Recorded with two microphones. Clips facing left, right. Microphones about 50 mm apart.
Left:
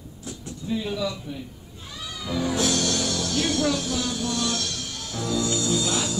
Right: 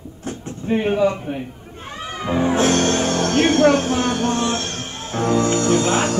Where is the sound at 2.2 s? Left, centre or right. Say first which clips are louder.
Right 7 dB; right.